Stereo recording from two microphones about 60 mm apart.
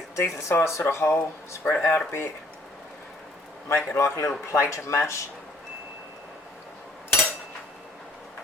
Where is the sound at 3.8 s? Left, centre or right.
Left.